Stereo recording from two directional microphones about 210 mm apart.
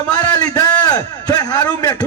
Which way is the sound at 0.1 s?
20° left (ahead or behind).